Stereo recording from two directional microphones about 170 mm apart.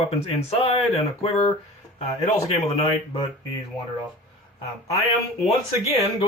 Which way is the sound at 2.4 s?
35° left (ahead or behind).